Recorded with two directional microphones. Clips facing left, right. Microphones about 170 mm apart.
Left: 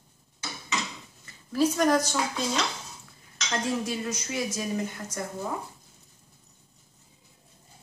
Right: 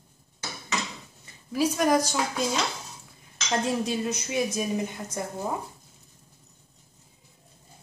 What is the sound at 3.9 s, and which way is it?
A woman's voice, 20° right (ahead or behind).